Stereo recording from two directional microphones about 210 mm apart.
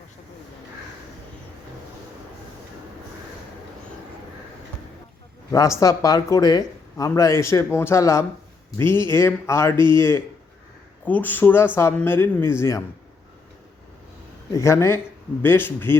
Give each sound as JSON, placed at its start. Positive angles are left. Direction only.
{"t": 5.5, "sound": "a man's voice", "side_deg": 15}
{"t": 9.7, "sound": "speech", "side_deg": -20}
{"t": 10.0, "sound": "a man's voice", "side_deg": 10}
{"t": 14.5, "sound": "a man's voice", "side_deg": 15}